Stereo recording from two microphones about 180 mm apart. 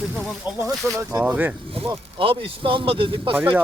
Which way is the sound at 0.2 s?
Centre (ahead or behind).